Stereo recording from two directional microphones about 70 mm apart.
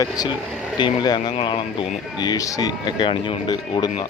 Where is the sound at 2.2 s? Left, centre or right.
Left.